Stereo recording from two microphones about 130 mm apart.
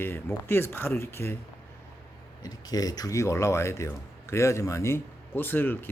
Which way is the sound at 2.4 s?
30° left (ahead or behind).